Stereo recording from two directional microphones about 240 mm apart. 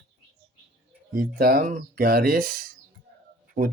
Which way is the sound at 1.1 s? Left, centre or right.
Right.